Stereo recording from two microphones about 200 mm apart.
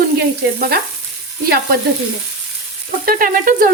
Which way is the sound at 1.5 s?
50° right (ahead or behind).